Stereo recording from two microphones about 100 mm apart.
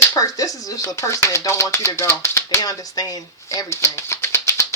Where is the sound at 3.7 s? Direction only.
25° left (ahead or behind).